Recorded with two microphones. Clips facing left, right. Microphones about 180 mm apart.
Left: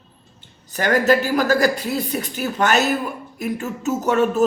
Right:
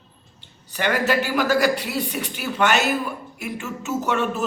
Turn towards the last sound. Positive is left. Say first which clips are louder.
# left 5 dB
turn(degrees=40)  # may be behind; listen again after turning